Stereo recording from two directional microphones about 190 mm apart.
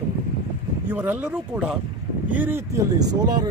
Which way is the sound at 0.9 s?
10° right (ahead or behind).